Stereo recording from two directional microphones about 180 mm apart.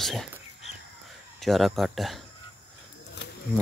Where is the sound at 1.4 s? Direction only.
Centre (ahead or behind).